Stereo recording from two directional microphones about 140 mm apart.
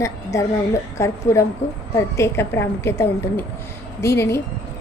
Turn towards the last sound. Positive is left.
turn(degrees=20)  # may be behind; listen again after turning